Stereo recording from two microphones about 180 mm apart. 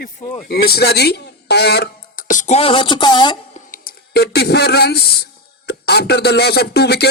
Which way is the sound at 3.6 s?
50° left (ahead or behind).